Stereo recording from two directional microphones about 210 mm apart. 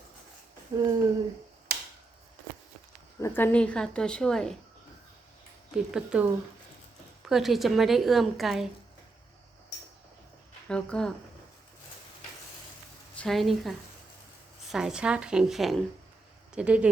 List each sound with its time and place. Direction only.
0.7 s a sound: 15° right (ahead or behind)
1.7 s tick-tock: 45° right (ahead or behind)
3.2 s a woman's voice: 10° left (ahead or behind)
5.7 s a woman's voice: 5° right (ahead or behind)
10.7 s a woman's voice: 5° left (ahead or behind)
13.1 s a woman's voice: centre (ahead or behind)